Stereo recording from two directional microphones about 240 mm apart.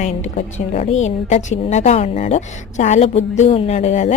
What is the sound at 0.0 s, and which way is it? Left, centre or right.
A woman's voice, left.